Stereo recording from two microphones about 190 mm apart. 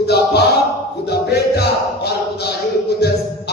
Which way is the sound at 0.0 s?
60° left (ahead or behind).